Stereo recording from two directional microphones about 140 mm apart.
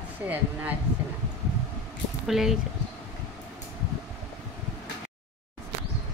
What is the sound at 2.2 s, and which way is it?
Speech, centre (ahead or behind).